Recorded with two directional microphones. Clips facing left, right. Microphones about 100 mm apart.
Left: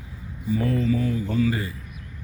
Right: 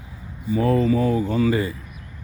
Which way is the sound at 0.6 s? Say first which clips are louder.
Right 5 dB; 75° right (ahead or behind).